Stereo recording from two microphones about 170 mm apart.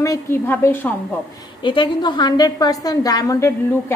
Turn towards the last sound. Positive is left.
turn(degrees=20)  # may be behind; listen again after turning